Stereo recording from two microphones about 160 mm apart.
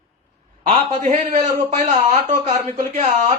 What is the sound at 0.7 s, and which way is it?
Speech, 45° right (ahead or behind).